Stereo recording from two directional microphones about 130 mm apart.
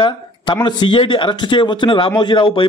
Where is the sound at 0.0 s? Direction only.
35° left (ahead or behind).